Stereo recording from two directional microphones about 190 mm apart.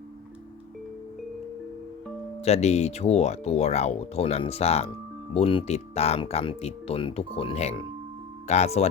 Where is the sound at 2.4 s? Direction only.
35° left (ahead or behind).